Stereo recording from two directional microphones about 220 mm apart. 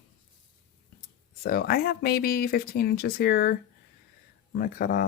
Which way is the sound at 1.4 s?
45° left (ahead or behind).